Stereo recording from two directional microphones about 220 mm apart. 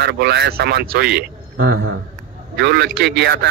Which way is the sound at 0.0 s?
50° right (ahead or behind).